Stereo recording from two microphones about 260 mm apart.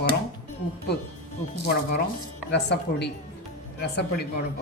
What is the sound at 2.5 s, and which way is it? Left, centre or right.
Speech, left.